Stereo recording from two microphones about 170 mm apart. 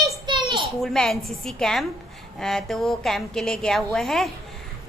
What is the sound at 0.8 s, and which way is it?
A woman's voice, centre (ahead or behind).